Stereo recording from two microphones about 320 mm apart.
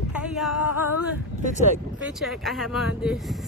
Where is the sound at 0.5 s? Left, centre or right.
Left.